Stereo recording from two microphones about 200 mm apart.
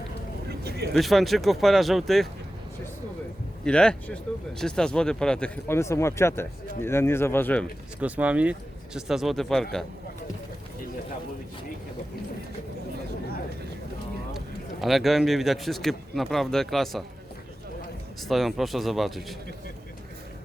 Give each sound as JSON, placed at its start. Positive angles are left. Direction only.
{"t": 0.4, "sound": "vehicle", "side_deg": -55}
{"t": 0.9, "sound": "speech", "side_deg": 0}
{"t": 3.6, "sound": "speech", "side_deg": 5}
{"t": 8.0, "sound": "speech", "side_deg": -5}
{"t": 14.3, "sound": "a man's voice", "side_deg": 0}
{"t": 18.2, "sound": "speech", "side_deg": 0}